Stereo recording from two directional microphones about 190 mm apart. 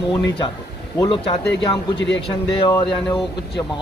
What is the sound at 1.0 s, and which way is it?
Speech, 30° left (ahead or behind).